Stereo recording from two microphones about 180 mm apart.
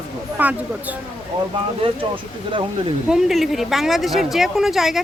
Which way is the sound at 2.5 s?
30° right (ahead or behind).